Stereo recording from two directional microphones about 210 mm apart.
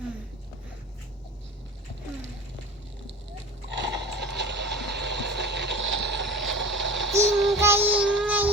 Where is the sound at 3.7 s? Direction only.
55° right (ahead or behind).